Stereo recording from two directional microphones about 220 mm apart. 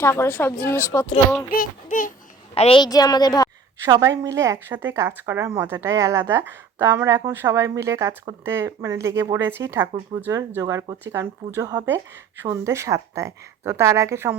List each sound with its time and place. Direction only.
0.0 s a woman's voice: 10° left (ahead or behind)
1.5 s a child's voice: 40° left (ahead or behind)
2.6 s a woman's voice: 25° left (ahead or behind)
3.8 s speech: 15° right (ahead or behind)